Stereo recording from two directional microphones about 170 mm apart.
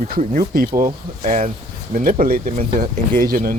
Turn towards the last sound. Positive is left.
turn(degrees=-55)  # may be behind; listen again after turning